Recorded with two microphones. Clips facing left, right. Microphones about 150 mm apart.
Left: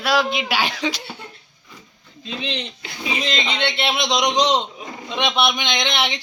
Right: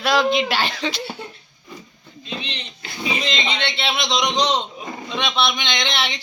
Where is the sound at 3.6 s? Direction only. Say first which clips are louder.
Left 2 dB; 15° left (ahead or behind).